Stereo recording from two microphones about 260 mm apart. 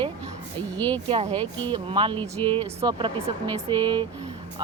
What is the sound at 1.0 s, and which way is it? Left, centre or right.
Speech, centre.